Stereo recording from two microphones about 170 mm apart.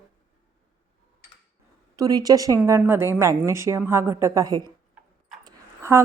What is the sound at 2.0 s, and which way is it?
Speech, 20° right (ahead or behind).